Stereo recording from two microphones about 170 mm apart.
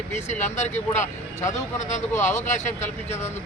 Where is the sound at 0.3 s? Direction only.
45° left (ahead or behind).